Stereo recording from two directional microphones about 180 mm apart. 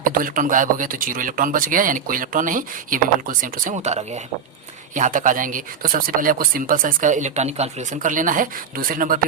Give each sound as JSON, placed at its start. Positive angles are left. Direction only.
{"t": 0.0, "sound": "speech", "side_deg": -50}